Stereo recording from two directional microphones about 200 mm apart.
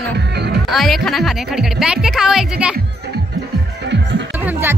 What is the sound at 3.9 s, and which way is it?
Music, 65° right (ahead or behind).